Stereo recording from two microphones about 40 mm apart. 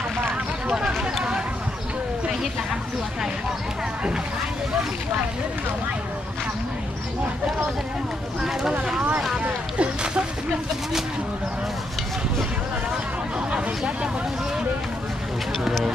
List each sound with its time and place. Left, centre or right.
0.7 s run: centre
8.4 s speech: centre
9.4 s a sound: right
13.5 s speech: right